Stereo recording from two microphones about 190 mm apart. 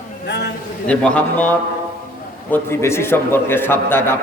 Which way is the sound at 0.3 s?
60° left (ahead or behind).